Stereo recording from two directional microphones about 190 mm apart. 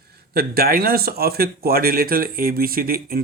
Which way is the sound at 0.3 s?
55° right (ahead or behind).